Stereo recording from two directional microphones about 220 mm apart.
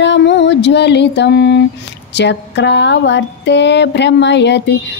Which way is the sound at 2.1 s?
50° left (ahead or behind).